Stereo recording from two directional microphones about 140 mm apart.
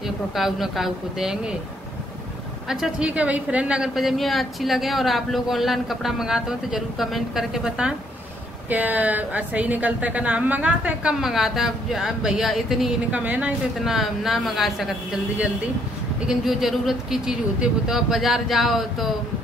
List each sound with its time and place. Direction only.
0.4 s a woman's voice: centre (ahead or behind)
2.7 s a woman's voice: 5° right (ahead or behind)
16.3 s a woman's voice: centre (ahead or behind)